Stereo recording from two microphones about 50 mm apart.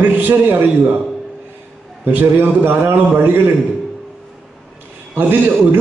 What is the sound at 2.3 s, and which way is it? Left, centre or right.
Speech, right.